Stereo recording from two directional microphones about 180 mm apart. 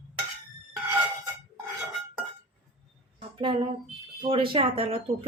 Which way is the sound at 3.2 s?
25° right (ahead or behind).